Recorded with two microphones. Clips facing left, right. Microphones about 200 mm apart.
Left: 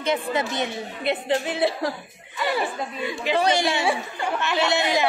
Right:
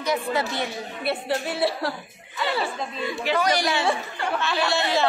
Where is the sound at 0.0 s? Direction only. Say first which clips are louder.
Left 1 dB; 25° left (ahead or behind).